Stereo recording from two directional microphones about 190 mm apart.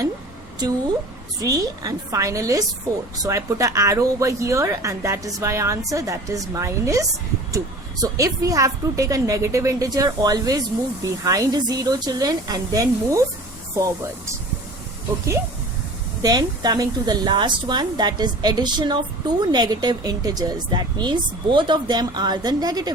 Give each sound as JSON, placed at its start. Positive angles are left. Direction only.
{"t": 1.4, "sound": "a woman's voice", "side_deg": -20}
{"t": 16.2, "sound": "a woman's voice", "side_deg": -20}